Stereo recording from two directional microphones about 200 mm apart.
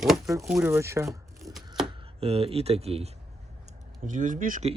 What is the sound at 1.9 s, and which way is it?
Speech, 25° right (ahead or behind).